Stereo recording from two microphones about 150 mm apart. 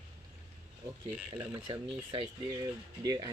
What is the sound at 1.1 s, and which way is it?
Speech, 15° right (ahead or behind).